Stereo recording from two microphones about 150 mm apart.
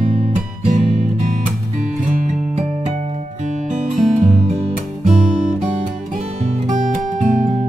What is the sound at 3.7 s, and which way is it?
Music, 50° right (ahead or behind).